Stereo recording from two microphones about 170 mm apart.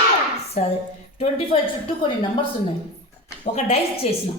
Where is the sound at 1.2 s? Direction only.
35° left (ahead or behind).